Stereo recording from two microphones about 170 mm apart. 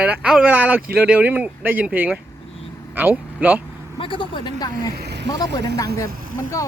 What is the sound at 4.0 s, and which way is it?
Speech, 30° left (ahead or behind).